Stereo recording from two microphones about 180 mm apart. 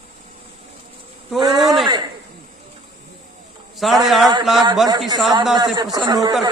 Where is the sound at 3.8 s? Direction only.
Centre (ahead or behind).